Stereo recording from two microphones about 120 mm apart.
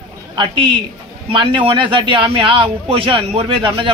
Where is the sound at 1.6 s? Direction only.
45° right (ahead or behind).